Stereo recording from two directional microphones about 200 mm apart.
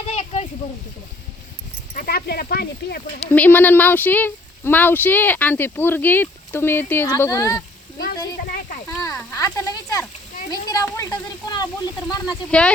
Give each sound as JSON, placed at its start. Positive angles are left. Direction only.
{"t": 0.1, "sound": "a sound", "side_deg": 35}
{"t": 2.0, "sound": "speech", "side_deg": 50}
{"t": 3.3, "sound": "speech", "side_deg": 10}
{"t": 7.9, "sound": "a sound", "side_deg": 45}
{"t": 8.9, "sound": "speech", "side_deg": 15}
{"t": 12.5, "sound": "speech", "side_deg": 5}